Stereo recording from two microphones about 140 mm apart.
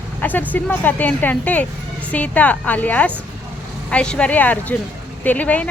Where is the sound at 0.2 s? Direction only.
10° left (ahead or behind).